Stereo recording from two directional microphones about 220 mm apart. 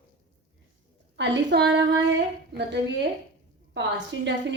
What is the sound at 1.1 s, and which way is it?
Speech, 55° right (ahead or behind).